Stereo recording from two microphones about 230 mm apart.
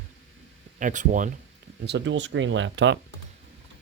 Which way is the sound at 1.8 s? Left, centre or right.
Right.